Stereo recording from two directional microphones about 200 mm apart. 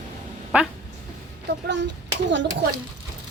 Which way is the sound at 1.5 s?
60° right (ahead or behind).